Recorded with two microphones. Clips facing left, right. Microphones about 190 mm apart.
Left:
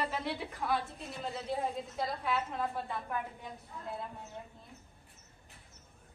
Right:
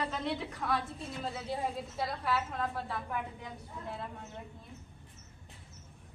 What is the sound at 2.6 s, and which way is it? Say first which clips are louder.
Speech: even; centre (ahead or behind).